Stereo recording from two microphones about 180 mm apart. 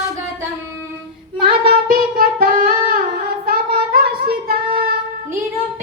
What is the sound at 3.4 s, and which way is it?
Female singing, 55° right (ahead or behind).